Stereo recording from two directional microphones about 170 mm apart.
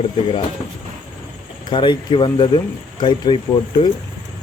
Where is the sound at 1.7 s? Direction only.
30° left (ahead or behind).